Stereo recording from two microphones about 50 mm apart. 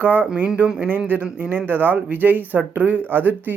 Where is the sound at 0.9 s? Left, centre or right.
Right.